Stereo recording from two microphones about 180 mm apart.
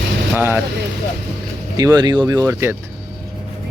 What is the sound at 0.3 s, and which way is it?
Speech, 10° right (ahead or behind).